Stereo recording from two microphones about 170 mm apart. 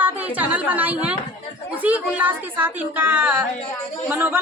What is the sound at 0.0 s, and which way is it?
A woman's voice, 10° right (ahead or behind).